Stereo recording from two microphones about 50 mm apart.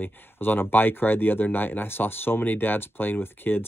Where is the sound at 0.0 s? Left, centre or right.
Left.